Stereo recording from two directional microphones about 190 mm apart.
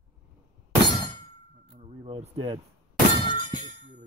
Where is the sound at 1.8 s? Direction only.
35° right (ahead or behind).